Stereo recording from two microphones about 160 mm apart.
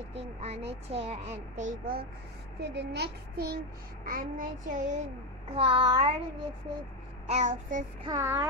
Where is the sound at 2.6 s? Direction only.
90° right.